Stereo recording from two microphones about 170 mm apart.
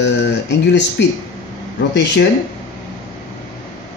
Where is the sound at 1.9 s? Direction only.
90° left.